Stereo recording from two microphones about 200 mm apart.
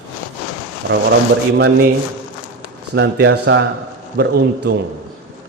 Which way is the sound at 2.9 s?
60° right (ahead or behind).